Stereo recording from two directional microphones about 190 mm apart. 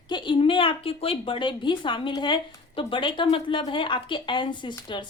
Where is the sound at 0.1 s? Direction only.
25° left (ahead or behind).